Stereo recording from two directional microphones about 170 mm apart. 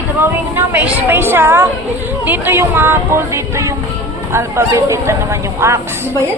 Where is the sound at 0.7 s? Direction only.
10° right (ahead or behind).